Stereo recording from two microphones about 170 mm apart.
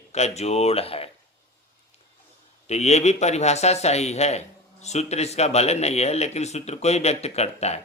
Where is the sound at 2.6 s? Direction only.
40° left (ahead or behind).